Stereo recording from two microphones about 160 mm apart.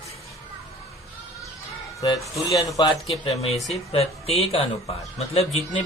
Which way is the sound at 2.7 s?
20° left (ahead or behind).